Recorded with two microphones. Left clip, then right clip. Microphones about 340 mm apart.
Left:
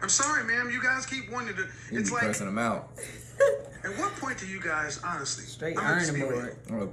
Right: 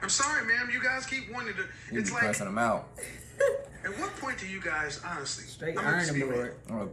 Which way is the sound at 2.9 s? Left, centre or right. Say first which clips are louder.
Left 4 dB; centre.